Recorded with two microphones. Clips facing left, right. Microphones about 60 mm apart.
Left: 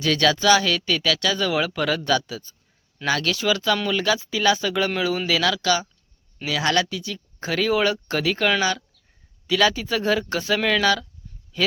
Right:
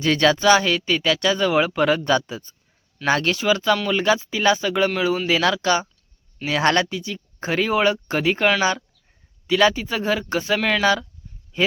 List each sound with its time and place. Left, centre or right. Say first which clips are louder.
0.0 s speech: right 2 dB; right
5.3 s speech: right 2 dB; right; by 10.8 s centre
11.5 s speech: right 2 dB; right